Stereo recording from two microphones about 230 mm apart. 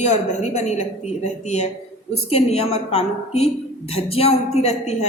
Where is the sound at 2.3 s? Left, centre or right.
Left.